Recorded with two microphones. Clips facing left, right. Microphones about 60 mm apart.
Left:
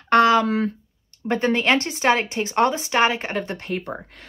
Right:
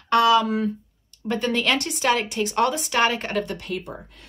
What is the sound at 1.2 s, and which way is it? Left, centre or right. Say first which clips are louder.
A woman's voice: left 3 dB; left.